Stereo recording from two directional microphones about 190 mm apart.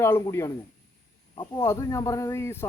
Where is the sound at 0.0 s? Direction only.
15° left (ahead or behind).